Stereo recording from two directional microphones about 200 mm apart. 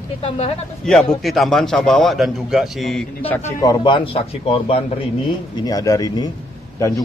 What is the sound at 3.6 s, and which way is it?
A man's voice, 20° left (ahead or behind).